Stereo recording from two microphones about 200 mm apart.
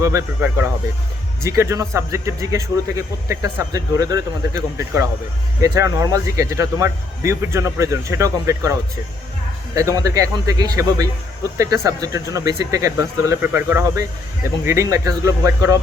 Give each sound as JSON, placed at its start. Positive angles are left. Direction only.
{"t": 0.0, "sound": "speech", "side_deg": -15}